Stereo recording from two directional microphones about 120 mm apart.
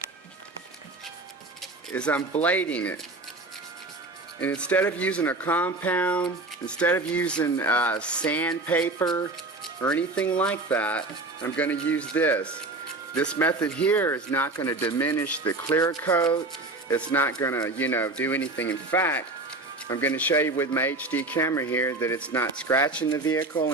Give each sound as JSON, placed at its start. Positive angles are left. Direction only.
{"t": 1.9, "sound": "speech", "side_deg": 10}
{"t": 4.4, "sound": "speech", "side_deg": 10}
{"t": 15.8, "sound": "speech", "side_deg": 25}